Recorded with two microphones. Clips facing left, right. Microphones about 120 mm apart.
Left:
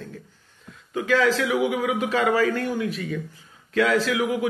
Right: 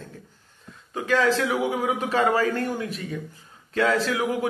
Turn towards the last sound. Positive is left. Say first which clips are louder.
# left 1 dB
turn(degrees=-40)  # may be behind; listen again after turning